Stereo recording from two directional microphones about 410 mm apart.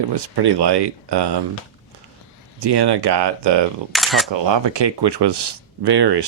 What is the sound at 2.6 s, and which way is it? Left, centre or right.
Speech, right.